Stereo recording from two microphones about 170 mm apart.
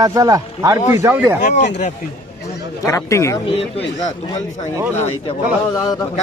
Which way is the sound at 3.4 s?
35° left (ahead or behind).